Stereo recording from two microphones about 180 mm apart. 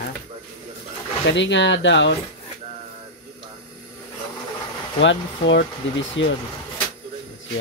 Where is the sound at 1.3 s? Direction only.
80° left.